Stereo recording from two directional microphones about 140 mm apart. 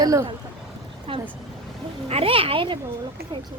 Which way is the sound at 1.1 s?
40° right (ahead or behind).